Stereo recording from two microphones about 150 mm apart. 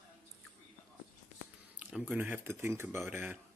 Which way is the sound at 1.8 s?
10° right (ahead or behind).